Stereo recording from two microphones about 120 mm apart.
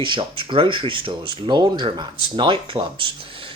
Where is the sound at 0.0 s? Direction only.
45° right (ahead or behind).